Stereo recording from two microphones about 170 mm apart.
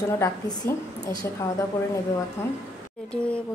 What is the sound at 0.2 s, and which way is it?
A woman's voice, 20° left (ahead or behind).